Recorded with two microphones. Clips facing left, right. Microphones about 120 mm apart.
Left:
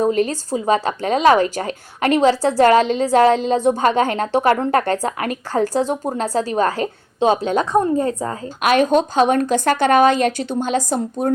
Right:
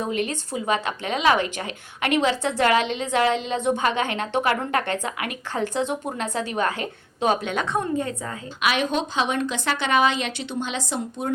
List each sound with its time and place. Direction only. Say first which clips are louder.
0.0 s speech: left 8 dB; 40° left (ahead or behind)